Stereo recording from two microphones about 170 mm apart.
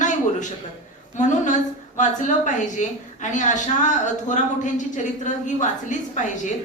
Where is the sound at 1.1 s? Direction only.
45° left (ahead or behind).